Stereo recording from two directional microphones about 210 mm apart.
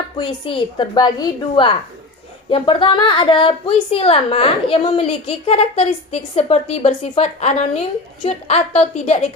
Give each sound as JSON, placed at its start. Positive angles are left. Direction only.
{"t": 0.2, "sound": "a woman's voice", "side_deg": 25}